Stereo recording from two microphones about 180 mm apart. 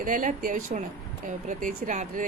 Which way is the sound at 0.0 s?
45° right (ahead or behind).